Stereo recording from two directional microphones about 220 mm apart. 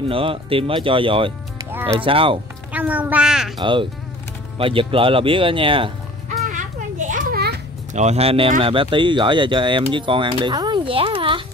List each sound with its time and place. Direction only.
0.1 s speech: 25° right (ahead or behind)
1.7 s music: 10° right (ahead or behind)
2.0 s speech: 25° right (ahead or behind)
2.7 s speech: 5° right (ahead or behind)
3.5 s speech: 20° right (ahead or behind)
6.4 s children playing: 35° right (ahead or behind)
7.9 s speech: 30° right (ahead or behind)